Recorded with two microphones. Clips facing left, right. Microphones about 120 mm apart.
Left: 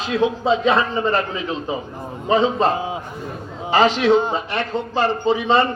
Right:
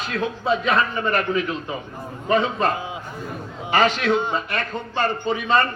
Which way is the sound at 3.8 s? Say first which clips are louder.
Left 4 dB; 30° left (ahead or behind).